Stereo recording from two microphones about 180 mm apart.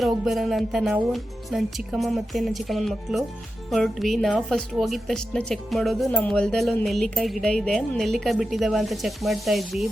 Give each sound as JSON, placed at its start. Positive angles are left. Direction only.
{"t": 0.0, "sound": "a woman's voice", "side_deg": 0}